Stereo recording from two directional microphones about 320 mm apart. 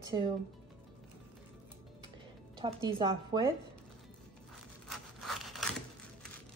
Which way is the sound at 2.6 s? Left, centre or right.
Centre.